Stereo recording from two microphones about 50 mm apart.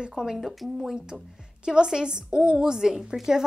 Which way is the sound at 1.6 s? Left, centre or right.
Centre.